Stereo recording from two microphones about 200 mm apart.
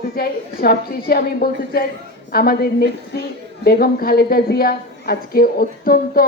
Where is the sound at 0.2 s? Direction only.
50° left (ahead or behind).